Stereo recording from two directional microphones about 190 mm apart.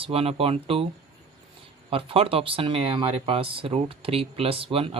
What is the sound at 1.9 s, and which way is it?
Speech, 30° right (ahead or behind).